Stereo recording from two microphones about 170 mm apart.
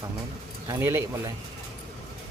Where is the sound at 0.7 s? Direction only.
15° right (ahead or behind).